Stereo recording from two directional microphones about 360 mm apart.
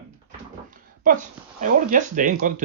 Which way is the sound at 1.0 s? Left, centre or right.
Right.